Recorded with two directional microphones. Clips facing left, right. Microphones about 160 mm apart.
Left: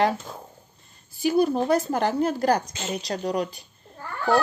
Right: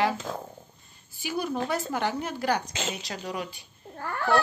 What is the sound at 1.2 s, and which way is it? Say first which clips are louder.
Speech: left 9 dB; 35° left (ahead or behind).